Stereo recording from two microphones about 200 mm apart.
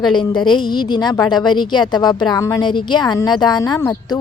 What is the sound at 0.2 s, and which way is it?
A woman's voice, 20° left (ahead or behind).